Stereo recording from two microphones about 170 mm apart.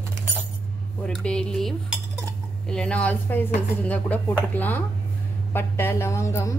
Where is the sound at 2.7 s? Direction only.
5° left (ahead or behind).